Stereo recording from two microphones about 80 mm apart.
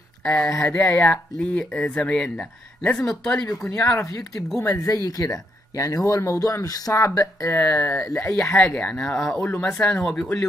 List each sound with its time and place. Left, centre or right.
0.2 s speech: centre
3.4 s speech: left
7.5 s speech: left
8.9 s speech: centre
9.7 s speech: centre
10.0 s speech: centre